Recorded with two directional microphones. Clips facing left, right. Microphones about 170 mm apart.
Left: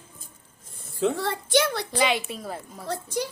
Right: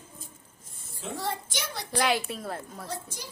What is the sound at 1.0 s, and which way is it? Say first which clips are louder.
Speech: left 8 dB; 65° left (ahead or behind).